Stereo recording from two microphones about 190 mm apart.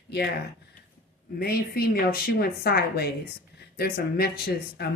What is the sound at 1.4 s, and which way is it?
A woman's voice, 55° left (ahead or behind).